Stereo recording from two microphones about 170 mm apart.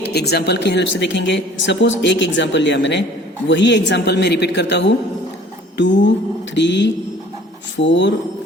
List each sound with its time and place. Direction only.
0.0 s speech: 75° left (ahead or behind); by 4.9 s 90° left
5.7 s a sound: 90° left
6.5 s speech: 90° left